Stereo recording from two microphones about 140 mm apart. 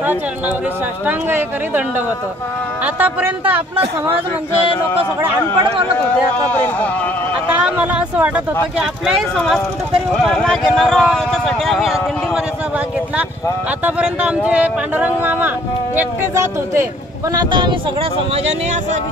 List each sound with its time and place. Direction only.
1.0 s speech: 15° right (ahead or behind)
5.6 s speech: 40° right (ahead or behind)
6.3 s speech: 10° left (ahead or behind)
7.6 s speech: 10° right (ahead or behind)
13.8 s speech: 10° right (ahead or behind)
17.3 s speech: 30° right (ahead or behind)